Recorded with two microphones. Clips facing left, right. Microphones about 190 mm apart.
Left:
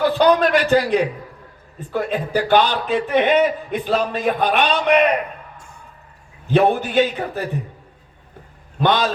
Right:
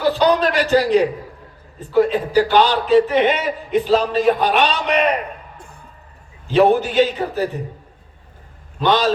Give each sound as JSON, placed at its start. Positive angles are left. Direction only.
{"t": 0.0, "sound": "a man's voice", "side_deg": 55}
{"t": 6.5, "sound": "a man's voice", "side_deg": 55}
{"t": 8.8, "sound": "a man's voice", "side_deg": 55}